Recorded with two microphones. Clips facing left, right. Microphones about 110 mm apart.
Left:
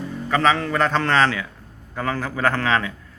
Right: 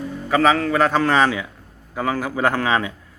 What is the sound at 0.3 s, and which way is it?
Speech, 10° right (ahead or behind).